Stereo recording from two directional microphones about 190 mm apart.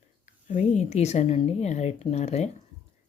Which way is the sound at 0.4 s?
40° left (ahead or behind).